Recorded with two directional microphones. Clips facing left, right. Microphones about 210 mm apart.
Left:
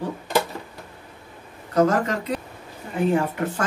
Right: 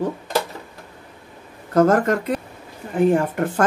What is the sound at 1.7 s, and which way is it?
Speech, 50° right (ahead or behind).